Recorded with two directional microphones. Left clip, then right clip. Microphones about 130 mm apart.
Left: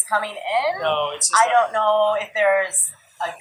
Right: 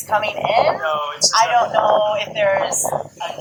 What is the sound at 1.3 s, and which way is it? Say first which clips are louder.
A woman's voice: right 1 dB; 10° right (ahead or behind).